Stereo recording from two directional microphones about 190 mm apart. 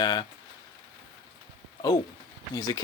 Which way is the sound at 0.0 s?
20° left (ahead or behind).